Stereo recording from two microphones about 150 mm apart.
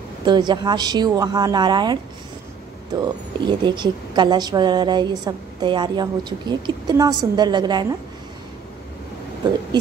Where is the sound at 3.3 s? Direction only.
30° right (ahead or behind).